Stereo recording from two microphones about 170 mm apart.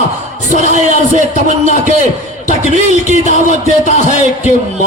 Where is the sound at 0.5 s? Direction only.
45° right (ahead or behind).